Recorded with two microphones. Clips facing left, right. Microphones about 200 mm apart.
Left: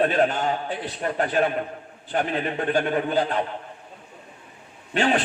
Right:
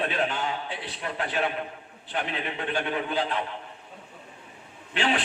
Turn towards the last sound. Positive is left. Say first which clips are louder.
# left 5 dB
turn(degrees=45)  # may be behind; listen again after turning